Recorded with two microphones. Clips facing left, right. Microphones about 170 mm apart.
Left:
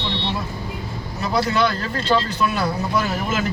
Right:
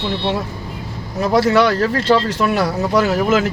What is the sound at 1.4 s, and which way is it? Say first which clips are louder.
Speech: right 7 dB; 80° right.